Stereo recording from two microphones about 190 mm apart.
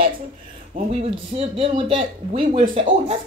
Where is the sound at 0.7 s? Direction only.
30° right (ahead or behind).